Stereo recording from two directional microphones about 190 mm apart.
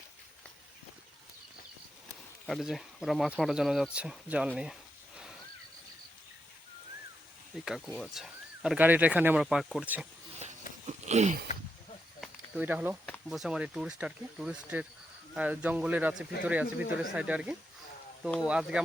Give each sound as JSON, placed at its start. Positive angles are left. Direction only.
{"t": 2.5, "sound": "speech", "side_deg": 0}
{"t": 3.9, "sound": "a sound", "side_deg": -5}
{"t": 7.6, "sound": "speech", "side_deg": 0}
{"t": 10.8, "sound": "a sound", "side_deg": -35}
{"t": 12.2, "sound": "snake", "side_deg": -10}
{"t": 13.1, "sound": "speech", "side_deg": 0}